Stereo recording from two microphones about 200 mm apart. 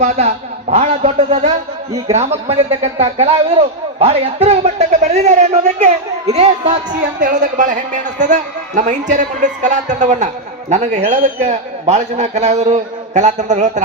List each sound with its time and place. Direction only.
0.0 s a man's voice: 30° right (ahead or behind)